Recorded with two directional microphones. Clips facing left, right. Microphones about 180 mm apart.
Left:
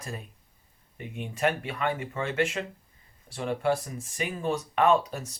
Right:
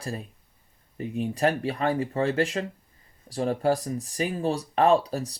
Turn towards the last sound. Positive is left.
turn(degrees=-35)  # may be behind; listen again after turning